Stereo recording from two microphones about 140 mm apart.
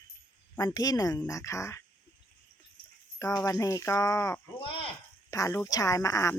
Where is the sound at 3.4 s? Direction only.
25° left (ahead or behind).